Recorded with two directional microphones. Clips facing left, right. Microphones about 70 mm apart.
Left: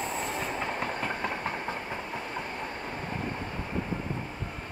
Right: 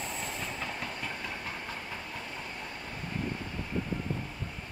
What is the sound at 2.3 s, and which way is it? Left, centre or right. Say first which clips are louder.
Train: left 6 dB; left.